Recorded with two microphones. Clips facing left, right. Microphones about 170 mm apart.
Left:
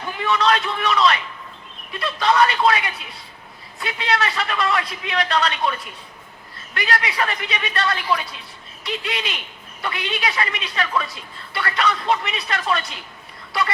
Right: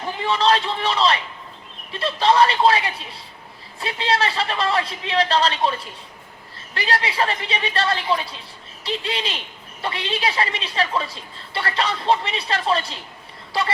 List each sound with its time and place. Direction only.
0.0 s a man's voice: 30° right (ahead or behind)